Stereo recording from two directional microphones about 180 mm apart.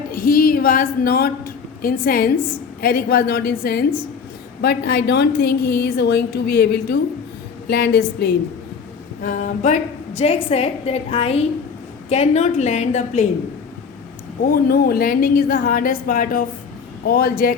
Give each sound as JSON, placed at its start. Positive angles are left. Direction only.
{"t": 0.1, "sound": "a woman's voice", "side_deg": 55}
{"t": 9.2, "sound": "a woman's voice", "side_deg": 45}
{"t": 14.4, "sound": "a woman's voice", "side_deg": 55}